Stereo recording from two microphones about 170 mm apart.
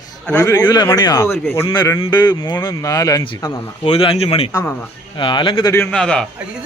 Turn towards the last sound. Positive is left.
turn(degrees=5)  # may be behind; listen again after turning